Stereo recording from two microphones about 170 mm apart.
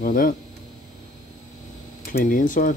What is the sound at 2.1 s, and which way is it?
Speech, 50° left (ahead or behind).